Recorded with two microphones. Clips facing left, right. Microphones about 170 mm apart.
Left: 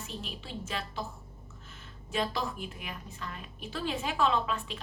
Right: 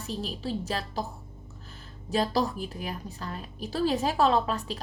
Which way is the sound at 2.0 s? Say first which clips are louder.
Right 6 dB; 35° right (ahead or behind).